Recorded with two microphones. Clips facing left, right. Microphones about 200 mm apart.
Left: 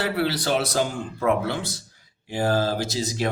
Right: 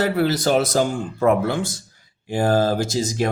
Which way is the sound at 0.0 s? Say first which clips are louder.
Right 5 dB; 45° right (ahead or behind).